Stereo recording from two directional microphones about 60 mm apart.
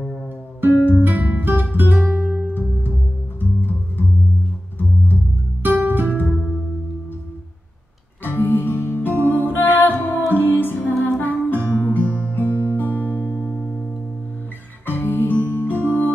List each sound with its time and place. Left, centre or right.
0.7 s music: left
1.0 s guitar: right
2.0 s music: right
3.3 s music: left
5.6 s music: right
8.4 s music: left
14.9 s music: left